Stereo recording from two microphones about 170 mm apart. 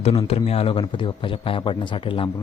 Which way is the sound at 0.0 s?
35° left (ahead or behind).